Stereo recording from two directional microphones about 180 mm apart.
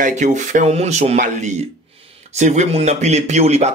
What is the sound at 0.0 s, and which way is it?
Speech, 40° right (ahead or behind).